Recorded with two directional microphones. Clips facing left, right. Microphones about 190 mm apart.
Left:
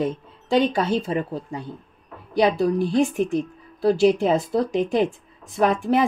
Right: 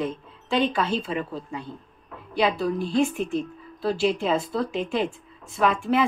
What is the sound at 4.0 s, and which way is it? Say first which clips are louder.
Speech: left 4 dB; 50° left (ahead or behind).